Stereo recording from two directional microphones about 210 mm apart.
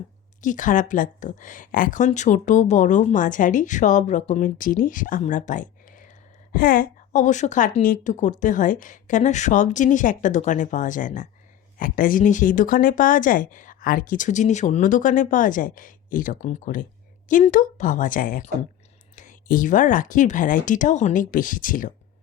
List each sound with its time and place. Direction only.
0.4 s a woman's voice: 35° left (ahead or behind)